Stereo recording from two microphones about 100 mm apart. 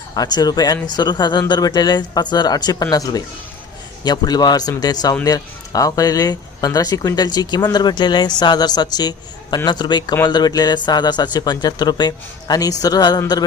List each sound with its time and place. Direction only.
0.2 s speech: 40° left (ahead or behind)